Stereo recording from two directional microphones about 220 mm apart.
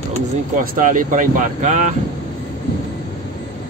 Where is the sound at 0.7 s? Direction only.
35° right (ahead or behind).